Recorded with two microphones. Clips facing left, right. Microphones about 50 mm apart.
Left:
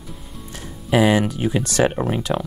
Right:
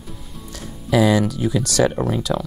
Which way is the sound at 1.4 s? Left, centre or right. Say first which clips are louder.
Even; left.